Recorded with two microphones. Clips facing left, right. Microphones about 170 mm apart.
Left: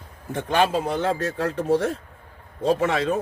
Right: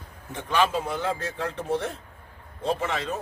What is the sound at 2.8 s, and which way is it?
Speech, 50° left (ahead or behind).